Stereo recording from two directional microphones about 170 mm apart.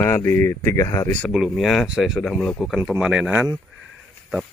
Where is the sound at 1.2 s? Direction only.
5° right (ahead or behind).